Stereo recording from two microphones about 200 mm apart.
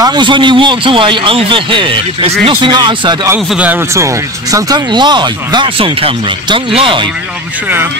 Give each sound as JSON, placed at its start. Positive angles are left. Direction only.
{"t": 0.0, "sound": "speech", "side_deg": -20}
{"t": 3.5, "sound": "speech", "side_deg": -10}